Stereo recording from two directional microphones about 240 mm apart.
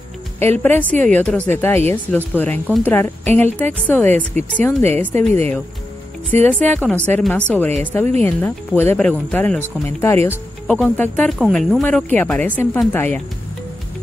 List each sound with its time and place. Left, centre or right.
0.4 s a woman's voice: centre